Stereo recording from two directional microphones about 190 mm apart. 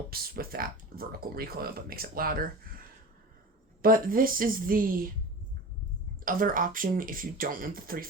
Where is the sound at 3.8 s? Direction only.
50° right (ahead or behind).